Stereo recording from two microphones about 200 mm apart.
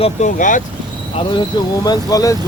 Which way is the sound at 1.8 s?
20° left (ahead or behind).